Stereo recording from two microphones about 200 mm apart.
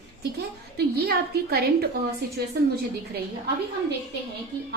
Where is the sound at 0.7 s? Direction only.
50° right (ahead or behind).